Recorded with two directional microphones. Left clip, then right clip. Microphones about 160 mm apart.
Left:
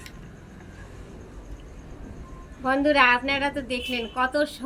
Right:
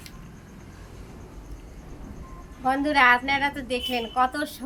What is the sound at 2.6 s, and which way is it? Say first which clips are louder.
A woman's voice: even; 20° right (ahead or behind).